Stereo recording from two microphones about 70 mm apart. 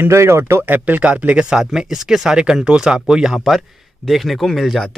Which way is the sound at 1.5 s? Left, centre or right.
Centre.